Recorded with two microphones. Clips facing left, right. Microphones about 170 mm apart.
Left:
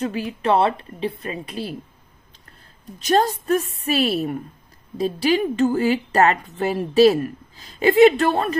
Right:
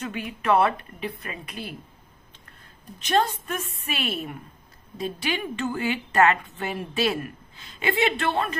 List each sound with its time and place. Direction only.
0.0 s a woman's voice: 35° left (ahead or behind)
3.0 s a woman's voice: 40° left (ahead or behind)